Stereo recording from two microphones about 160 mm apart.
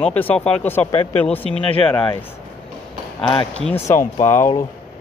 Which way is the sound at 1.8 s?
5° left (ahead or behind).